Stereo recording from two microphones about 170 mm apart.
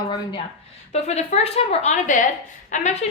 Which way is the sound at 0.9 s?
40° left (ahead or behind).